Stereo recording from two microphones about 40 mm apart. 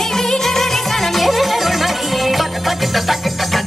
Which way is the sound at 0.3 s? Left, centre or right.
Centre.